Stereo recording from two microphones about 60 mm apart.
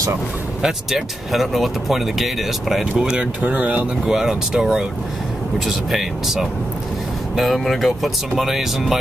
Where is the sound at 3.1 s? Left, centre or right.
Right.